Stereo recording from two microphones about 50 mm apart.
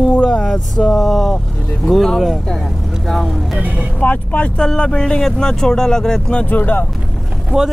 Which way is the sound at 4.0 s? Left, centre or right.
Left.